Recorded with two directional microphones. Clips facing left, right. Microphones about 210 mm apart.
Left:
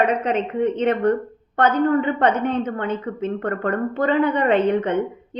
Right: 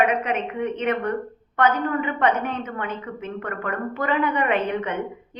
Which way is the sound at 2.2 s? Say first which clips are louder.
Left 4 dB; 30° left (ahead or behind).